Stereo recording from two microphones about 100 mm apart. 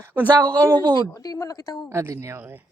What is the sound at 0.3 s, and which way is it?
Speech, 35° right (ahead or behind).